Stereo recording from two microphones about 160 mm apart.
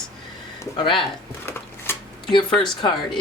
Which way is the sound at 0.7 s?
30° left (ahead or behind).